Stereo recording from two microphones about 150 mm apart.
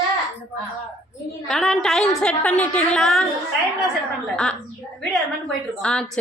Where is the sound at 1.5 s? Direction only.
5° left (ahead or behind).